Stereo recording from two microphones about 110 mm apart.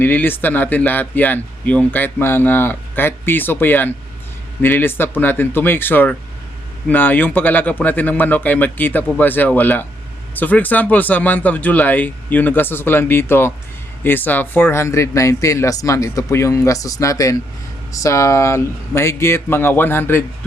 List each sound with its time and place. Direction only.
0.0 s speech: 20° left (ahead or behind)